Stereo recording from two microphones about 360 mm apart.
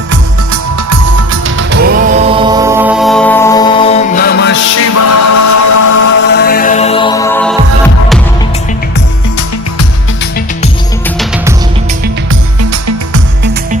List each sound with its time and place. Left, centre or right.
1.5 s music: right
2.3 s music: centre; by 4.9 s left
4.9 s music: left
6.0 s music: left; by 7.5 s centre